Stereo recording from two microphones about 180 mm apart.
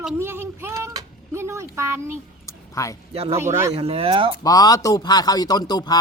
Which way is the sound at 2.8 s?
20° left (ahead or behind).